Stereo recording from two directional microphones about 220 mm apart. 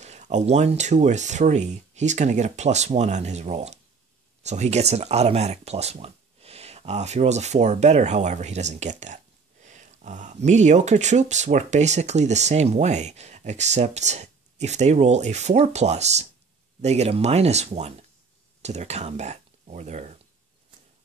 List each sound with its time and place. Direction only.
0.0 s speech: 30° right (ahead or behind)